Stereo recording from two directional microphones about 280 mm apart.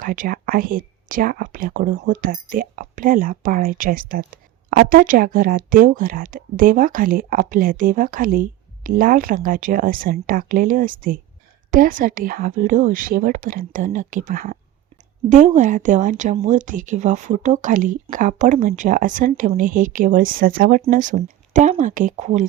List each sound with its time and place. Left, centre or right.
0.0 s speech: right